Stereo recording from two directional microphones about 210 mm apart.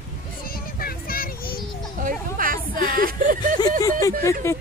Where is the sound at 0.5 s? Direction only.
45° left (ahead or behind).